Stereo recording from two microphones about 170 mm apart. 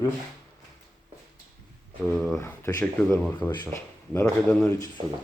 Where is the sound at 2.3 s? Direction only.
15° left (ahead or behind).